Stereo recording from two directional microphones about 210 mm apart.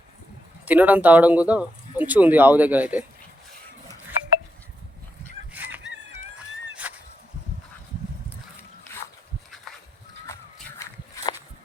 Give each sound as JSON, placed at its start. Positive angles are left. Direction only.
{"t": 0.6, "sound": "speech", "side_deg": -5}
{"t": 5.5, "sound": "fowl", "side_deg": -10}
{"t": 6.8, "sound": "a sound", "side_deg": -5}
{"t": 10.8, "sound": "walk", "side_deg": 15}